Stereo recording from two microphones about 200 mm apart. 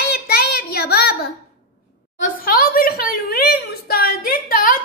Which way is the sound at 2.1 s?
45° left (ahead or behind).